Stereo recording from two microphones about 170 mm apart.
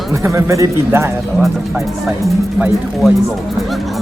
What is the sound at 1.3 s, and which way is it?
Speech, centre (ahead or behind).